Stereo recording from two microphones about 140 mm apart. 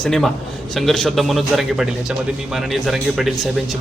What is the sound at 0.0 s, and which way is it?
A man's voice, 5° left (ahead or behind).